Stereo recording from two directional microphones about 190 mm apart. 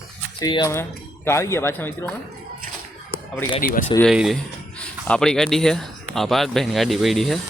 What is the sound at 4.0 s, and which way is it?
Speech, centre (ahead or behind).